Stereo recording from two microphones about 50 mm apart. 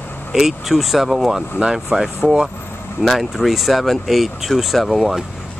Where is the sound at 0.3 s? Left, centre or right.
Centre.